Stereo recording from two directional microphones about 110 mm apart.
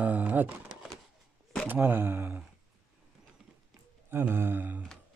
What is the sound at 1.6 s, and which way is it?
Speech, 20° right (ahead or behind).